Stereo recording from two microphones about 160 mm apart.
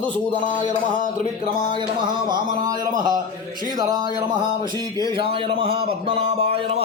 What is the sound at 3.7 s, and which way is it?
Speech, 25° right (ahead or behind).